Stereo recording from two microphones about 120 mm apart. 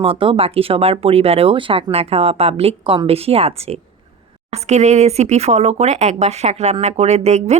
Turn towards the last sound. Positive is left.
turn(degrees=-65)  # may be behind; listen again after turning